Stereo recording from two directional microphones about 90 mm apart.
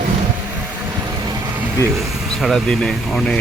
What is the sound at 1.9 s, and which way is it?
Speech, centre (ahead or behind).